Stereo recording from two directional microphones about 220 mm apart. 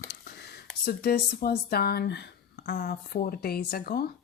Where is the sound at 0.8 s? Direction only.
40° left (ahead or behind).